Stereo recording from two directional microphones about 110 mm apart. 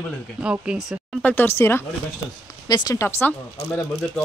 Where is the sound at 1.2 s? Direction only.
20° left (ahead or behind).